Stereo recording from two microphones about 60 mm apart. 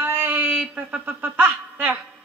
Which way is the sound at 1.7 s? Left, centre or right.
Right.